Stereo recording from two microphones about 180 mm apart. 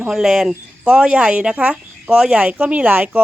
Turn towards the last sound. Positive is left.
turn(degrees=-10)  # may be behind; listen again after turning